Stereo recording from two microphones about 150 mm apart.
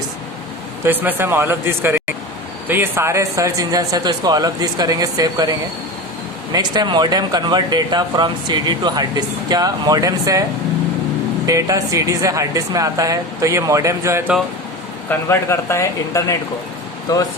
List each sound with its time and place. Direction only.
0.9 s speech: 15° right (ahead or behind)
11.4 s speech: 20° right (ahead or behind)
15.1 s speech: 15° left (ahead or behind)